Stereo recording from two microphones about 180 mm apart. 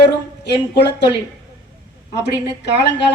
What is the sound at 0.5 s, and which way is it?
Speech, 70° left (ahead or behind).